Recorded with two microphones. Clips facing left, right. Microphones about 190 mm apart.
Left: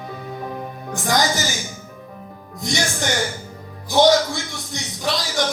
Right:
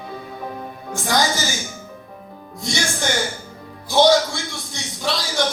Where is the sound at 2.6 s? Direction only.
20° left (ahead or behind).